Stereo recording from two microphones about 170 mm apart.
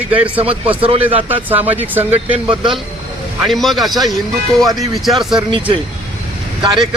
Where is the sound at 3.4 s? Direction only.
Centre (ahead or behind).